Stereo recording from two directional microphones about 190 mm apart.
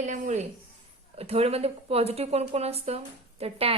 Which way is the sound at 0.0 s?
40° right (ahead or behind).